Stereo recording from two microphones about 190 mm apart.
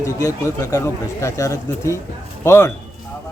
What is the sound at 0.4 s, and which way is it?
A man's voice, 15° left (ahead or behind).